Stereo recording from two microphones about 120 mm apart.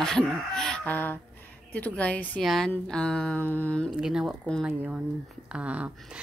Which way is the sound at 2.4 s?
5° left (ahead or behind).